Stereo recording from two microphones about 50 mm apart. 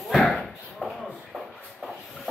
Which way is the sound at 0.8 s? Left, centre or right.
Left.